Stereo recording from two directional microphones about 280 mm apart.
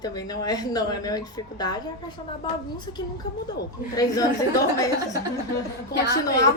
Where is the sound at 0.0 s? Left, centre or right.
Centre.